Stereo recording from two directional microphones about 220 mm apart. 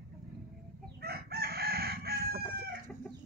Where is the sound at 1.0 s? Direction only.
45° right (ahead or behind).